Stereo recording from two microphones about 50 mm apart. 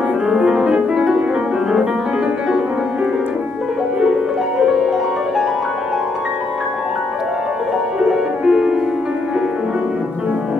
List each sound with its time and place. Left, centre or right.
0.5 s music: centre
8.5 s music: centre